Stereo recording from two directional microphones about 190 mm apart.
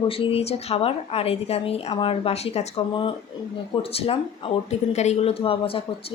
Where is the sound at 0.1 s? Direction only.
30° left (ahead or behind).